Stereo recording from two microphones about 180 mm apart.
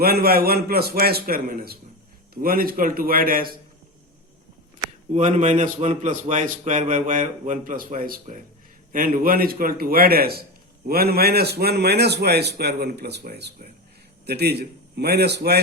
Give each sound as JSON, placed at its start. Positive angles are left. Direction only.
{"t": 0.0, "sound": "a man's voice", "side_deg": -60}
{"t": 5.1, "sound": "a man's voice", "side_deg": -45}